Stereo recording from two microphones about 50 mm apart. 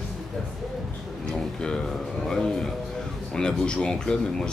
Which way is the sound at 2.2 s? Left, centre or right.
Centre.